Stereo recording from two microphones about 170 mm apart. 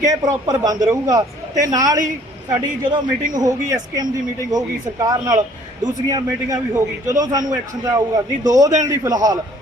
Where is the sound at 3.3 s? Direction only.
20° right (ahead or behind).